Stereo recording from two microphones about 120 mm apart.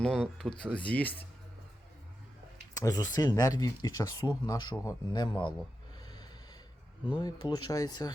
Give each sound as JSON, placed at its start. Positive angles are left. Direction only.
{"t": 0.0, "sound": "speech", "side_deg": 5}
{"t": 2.7, "sound": "speech", "side_deg": 30}
{"t": 5.1, "sound": "speech", "side_deg": 40}
{"t": 7.1, "sound": "speech", "side_deg": 35}